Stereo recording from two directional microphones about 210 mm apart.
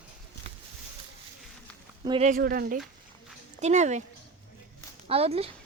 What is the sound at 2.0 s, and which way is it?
Speech, 25° right (ahead or behind).